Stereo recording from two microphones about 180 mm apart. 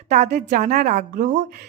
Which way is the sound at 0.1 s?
40° right (ahead or behind).